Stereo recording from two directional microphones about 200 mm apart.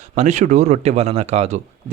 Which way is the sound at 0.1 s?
35° right (ahead or behind).